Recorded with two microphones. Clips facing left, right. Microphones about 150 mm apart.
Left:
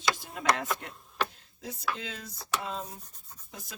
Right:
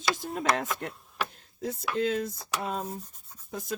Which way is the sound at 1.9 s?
50° right (ahead or behind).